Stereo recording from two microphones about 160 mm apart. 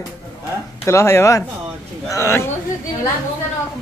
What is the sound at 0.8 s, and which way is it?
Speech, 15° left (ahead or behind).